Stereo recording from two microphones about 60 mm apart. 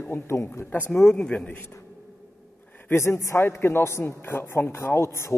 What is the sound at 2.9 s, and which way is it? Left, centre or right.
A man's voice, left.